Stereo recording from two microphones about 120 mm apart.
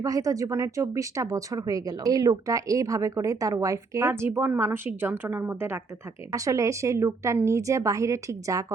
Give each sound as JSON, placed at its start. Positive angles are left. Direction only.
{"t": 0.0, "sound": "speech", "side_deg": -30}